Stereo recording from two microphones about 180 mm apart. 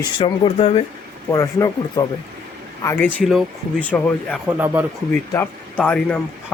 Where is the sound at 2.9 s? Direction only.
10° left (ahead or behind).